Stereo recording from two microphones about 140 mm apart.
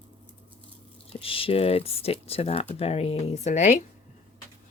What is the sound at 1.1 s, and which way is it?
A woman's voice, 40° left (ahead or behind).